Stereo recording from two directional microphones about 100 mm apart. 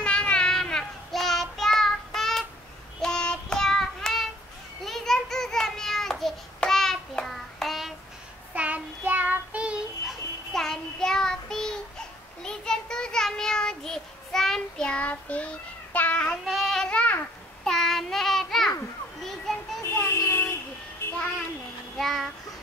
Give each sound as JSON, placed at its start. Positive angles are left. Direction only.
{"t": 0.0, "sound": "child singing", "side_deg": 10}
{"t": 8.5, "sound": "child singing", "side_deg": -15}
{"t": 10.0, "sound": "child singing", "side_deg": 5}
{"t": 16.4, "sound": "child singing", "side_deg": 0}
{"t": 20.1, "sound": "a sound", "side_deg": 25}
{"t": 21.9, "sound": "child singing", "side_deg": 0}